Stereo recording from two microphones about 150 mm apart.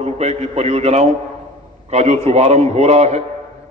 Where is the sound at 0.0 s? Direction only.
45° right (ahead or behind).